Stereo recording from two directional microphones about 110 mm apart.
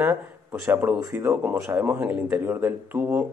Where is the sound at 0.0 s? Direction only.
20° right (ahead or behind).